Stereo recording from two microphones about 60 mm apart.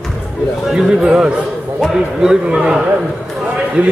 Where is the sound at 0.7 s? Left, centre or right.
Centre.